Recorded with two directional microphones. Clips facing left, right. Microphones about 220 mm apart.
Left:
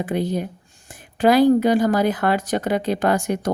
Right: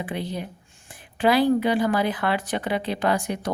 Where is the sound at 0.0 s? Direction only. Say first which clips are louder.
Left 7 dB; 45° left (ahead or behind).